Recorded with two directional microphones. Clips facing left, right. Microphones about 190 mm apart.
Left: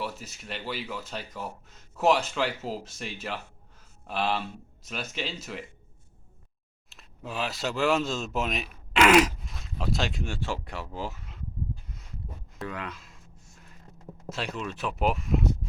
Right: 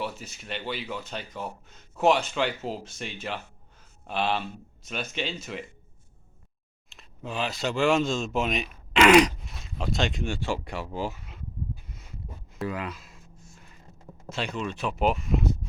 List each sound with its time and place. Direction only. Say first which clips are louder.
0.0 s speech: right 1 dB; centre (ahead or behind)
6.9 s speech: right 2 dB; 5° left (ahead or behind)
12.5 s speech: right 4 dB; 5° right (ahead or behind)
14.3 s speech: right 2 dB; centre (ahead or behind)